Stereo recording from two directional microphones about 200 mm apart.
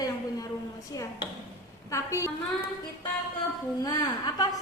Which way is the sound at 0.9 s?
15° left (ahead or behind).